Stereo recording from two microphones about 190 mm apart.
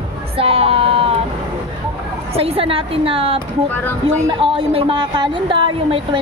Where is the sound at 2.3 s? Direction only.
30° right (ahead or behind).